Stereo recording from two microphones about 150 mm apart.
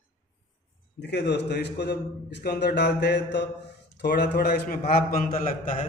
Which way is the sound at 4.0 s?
90° left.